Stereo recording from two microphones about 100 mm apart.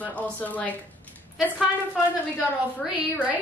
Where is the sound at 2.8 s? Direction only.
15° right (ahead or behind).